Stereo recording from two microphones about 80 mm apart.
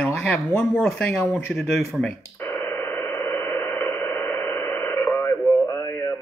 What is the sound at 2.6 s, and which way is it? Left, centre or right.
Radio, left.